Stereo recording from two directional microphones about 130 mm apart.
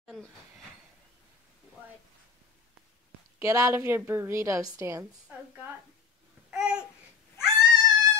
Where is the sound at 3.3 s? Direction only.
25° right (ahead or behind).